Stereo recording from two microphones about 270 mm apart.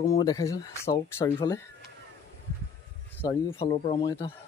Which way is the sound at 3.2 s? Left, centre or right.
Centre.